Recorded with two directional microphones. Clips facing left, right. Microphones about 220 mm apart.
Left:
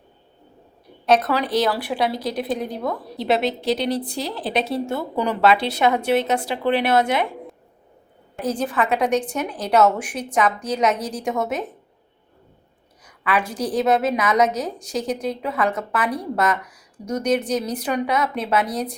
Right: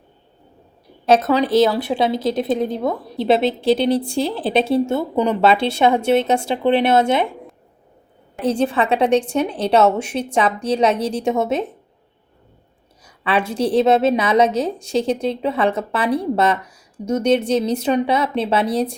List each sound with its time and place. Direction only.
1.0 s speech: 25° right (ahead or behind)
8.4 s speech: 30° right (ahead or behind)
13.1 s speech: 30° right (ahead or behind)